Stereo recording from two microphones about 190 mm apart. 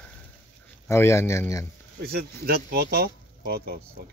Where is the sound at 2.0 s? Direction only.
55° right (ahead or behind).